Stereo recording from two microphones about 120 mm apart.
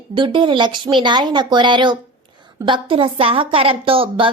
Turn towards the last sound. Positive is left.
turn(degrees=-50)  # may be behind; listen again after turning